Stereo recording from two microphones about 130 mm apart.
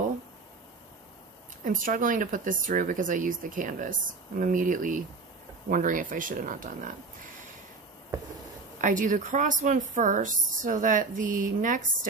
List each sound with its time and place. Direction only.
1.6 s speech: 90° right
8.8 s speech: 85° right